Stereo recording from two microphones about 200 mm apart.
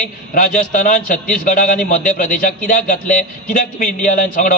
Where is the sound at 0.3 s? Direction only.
45° left (ahead or behind).